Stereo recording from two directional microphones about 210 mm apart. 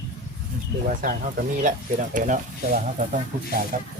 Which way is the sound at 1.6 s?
40° right (ahead or behind).